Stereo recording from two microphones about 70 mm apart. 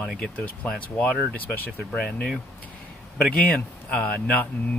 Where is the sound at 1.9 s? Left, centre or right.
Centre.